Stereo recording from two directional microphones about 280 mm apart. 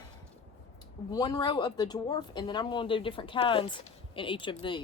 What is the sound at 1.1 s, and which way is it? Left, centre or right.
Speech, centre.